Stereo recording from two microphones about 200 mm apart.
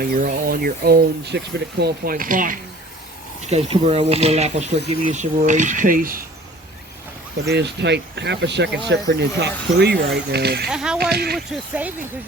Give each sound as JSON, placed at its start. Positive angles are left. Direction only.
{"t": 0.0, "sound": "speech", "side_deg": -45}
{"t": 3.5, "sound": "speech", "side_deg": -30}
{"t": 7.4, "sound": "speech", "side_deg": -60}
{"t": 10.7, "sound": "speech", "side_deg": 0}
{"t": 11.1, "sound": "speech", "side_deg": -50}
{"t": 11.3, "sound": "speech", "side_deg": -5}